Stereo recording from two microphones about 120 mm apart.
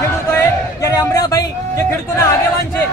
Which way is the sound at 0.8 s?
30° left (ahead or behind).